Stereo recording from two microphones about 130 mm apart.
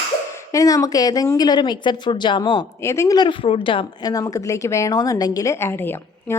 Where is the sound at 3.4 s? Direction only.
45° left (ahead or behind).